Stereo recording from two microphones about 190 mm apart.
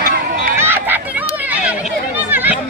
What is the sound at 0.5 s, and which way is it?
Run, 10° right (ahead or behind).